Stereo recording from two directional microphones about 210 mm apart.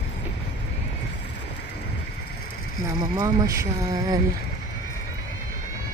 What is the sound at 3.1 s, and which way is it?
Speech, 15° right (ahead or behind).